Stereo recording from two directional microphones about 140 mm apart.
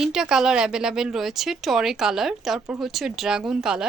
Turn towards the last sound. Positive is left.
turn(degrees=-5)  # may be behind; listen again after turning